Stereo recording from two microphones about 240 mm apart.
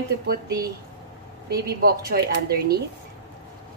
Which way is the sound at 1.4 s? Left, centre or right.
Right.